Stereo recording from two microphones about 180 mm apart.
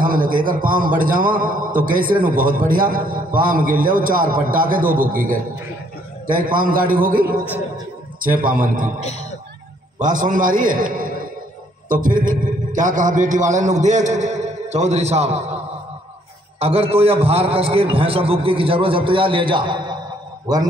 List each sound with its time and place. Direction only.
0.0 s a man's voice: 50° right (ahead or behind)
9.9 s a man's voice: 45° right (ahead or behind)
16.5 s a man's voice: 35° right (ahead or behind)